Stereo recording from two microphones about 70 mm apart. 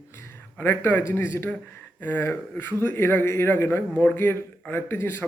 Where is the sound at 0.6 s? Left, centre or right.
Left.